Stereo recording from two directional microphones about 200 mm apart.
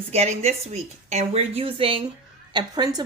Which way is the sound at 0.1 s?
35° right (ahead or behind).